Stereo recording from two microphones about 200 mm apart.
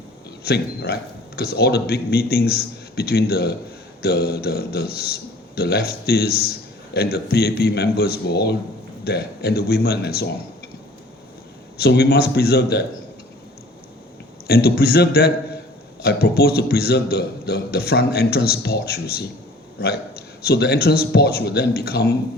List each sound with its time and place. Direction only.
0.4 s a man's voice: 55° left (ahead or behind)
11.8 s a man's voice: 50° left (ahead or behind)
14.4 s a man's voice: 50° left (ahead or behind)
20.4 s a man's voice: 55° left (ahead or behind)